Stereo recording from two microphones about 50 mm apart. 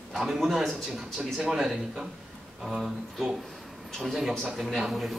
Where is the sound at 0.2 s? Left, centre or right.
Centre.